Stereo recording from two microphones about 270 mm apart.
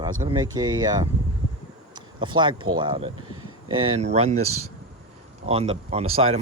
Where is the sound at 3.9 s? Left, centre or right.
Right.